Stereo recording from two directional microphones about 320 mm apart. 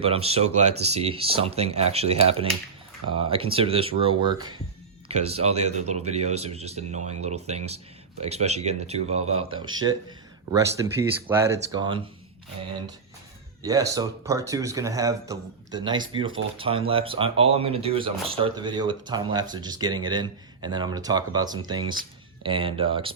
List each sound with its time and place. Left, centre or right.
0.0 s speech: centre
13.6 s speech: centre